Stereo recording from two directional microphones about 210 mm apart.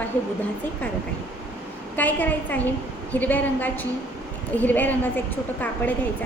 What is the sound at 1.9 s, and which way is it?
A woman's voice, 10° left (ahead or behind).